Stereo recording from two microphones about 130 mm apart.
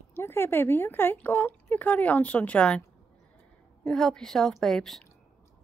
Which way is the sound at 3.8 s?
5° left (ahead or behind).